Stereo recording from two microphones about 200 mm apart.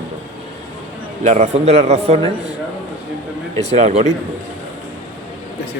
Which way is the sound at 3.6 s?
35° right (ahead or behind).